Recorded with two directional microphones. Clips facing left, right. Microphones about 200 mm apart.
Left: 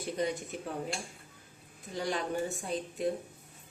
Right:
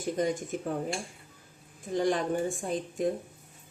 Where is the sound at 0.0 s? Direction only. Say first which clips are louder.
Right 4 dB; 45° right (ahead or behind).